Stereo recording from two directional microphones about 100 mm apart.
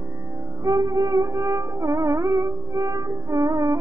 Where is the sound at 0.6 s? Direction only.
35° right (ahead or behind).